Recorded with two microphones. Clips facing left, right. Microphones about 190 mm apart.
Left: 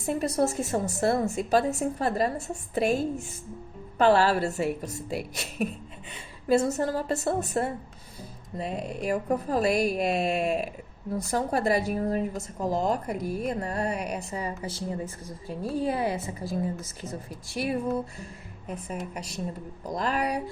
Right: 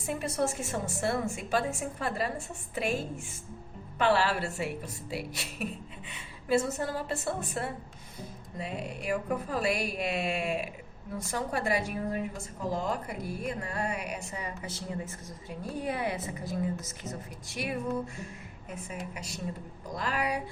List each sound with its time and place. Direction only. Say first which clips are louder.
0.1 s a woman's voice: left 5 dB; 40° left (ahead or behind)
19.9 s a woman's voice: left 4 dB; 40° left (ahead or behind)